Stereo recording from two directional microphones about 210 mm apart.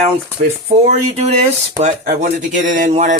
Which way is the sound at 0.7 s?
35° right (ahead or behind).